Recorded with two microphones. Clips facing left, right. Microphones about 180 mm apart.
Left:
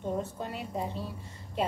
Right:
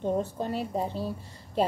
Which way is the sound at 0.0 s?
30° right (ahead or behind).